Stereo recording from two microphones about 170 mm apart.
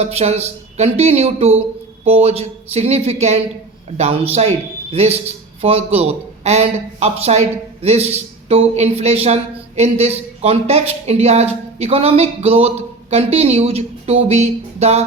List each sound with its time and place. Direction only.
0.0 s a man's voice: 40° right (ahead or behind)